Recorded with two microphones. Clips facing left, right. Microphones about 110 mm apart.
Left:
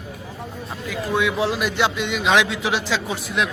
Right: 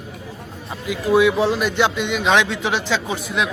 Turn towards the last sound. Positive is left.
turn(degrees=0)  # may be behind; listen again after turning